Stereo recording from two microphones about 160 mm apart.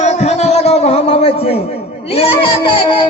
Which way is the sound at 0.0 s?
45° left (ahead or behind).